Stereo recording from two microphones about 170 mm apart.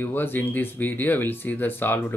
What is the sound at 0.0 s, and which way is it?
Speech, 10° left (ahead or behind).